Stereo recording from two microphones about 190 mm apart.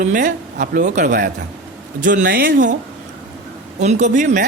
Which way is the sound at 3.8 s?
40° right (ahead or behind).